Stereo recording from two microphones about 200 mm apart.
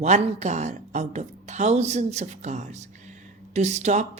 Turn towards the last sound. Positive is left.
turn(degrees=-35)  # may be behind; listen again after turning